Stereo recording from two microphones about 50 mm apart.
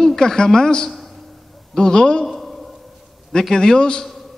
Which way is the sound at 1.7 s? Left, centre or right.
Centre.